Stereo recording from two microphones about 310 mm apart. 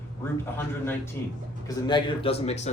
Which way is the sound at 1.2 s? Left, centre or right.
Centre.